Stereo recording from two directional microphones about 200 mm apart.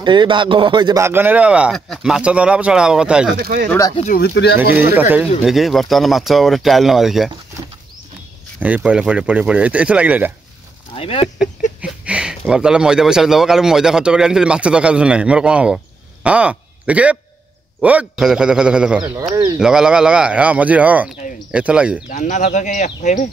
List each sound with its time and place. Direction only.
0.0 s speech: 25° right (ahead or behind); by 3.3 s 5° right (ahead or behind)
3.3 s speech: 50° right (ahead or behind)
3.9 s speech: 35° left (ahead or behind)
4.2 s speech: 55° left (ahead or behind)
5.4 s speech: centre (ahead or behind)
8.5 s speech: 5° right (ahead or behind)
11.0 s speech: 30° left (ahead or behind)
11.8 s speech: 5° right (ahead or behind)
22.1 s speech: 40° left (ahead or behind)